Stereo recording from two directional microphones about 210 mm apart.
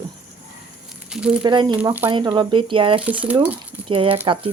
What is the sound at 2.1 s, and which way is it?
Speech, 20° right (ahead or behind).